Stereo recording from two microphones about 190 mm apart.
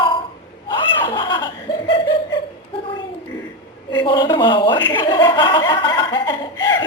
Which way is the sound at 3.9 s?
25° left (ahead or behind).